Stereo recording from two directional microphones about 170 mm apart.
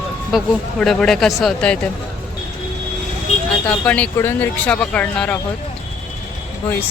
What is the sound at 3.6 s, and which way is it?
Speech, 5° left (ahead or behind).